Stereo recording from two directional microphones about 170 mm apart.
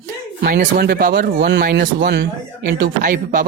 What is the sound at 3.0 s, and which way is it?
Speech, 50° right (ahead or behind).